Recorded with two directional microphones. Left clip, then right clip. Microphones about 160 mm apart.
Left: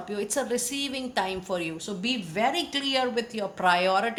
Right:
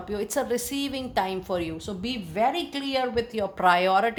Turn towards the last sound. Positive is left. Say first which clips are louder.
# right 2 dB
turn(degrees=-45)  # may be behind; listen again after turning